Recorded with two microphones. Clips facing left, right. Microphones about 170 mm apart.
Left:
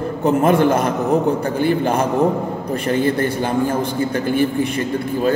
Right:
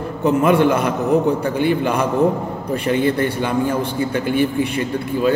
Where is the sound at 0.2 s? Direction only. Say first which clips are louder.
Even; 45° left (ahead or behind).